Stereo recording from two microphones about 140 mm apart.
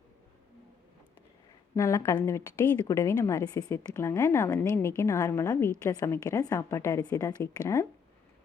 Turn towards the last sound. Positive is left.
turn(degrees=20)  # may be behind; listen again after turning